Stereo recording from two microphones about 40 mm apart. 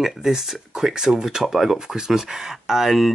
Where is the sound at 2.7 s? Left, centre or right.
Centre.